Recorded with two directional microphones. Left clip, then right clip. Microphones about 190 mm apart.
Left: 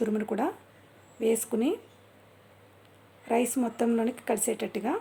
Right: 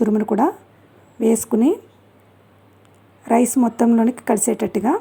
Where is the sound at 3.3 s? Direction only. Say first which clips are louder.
Right 10 dB; 30° right (ahead or behind).